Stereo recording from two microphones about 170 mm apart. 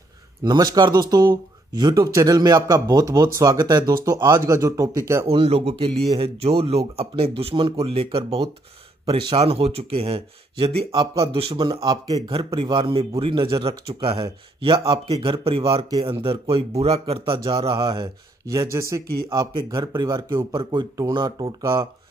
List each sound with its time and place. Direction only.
0.4 s speech: 25° right (ahead or behind)
5.2 s speech: 35° right (ahead or behind)
18.5 s speech: 20° right (ahead or behind)